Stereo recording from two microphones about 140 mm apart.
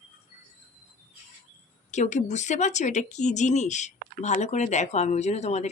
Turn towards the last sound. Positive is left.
turn(degrees=55)  # may be behind; listen again after turning